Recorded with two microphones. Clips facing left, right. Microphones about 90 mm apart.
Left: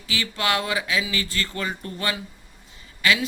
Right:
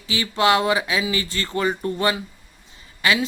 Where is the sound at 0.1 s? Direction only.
25° right (ahead or behind).